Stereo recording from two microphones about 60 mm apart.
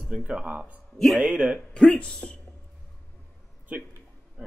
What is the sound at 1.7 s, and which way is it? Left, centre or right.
Speech, centre.